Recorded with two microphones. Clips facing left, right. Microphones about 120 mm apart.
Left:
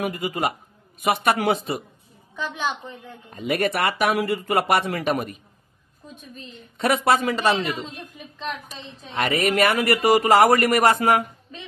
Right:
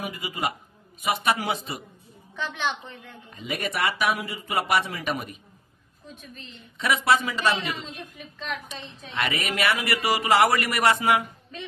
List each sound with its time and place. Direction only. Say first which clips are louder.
0.0 s a man's voice: left 5 dB; 55° left (ahead or behind)
3.3 s a man's voice: left 8 dB; 55° left (ahead or behind)
6.5 s speech: left 4 dB; 50° left (ahead or behind)
9.1 s speech: left 7 dB; 45° left (ahead or behind)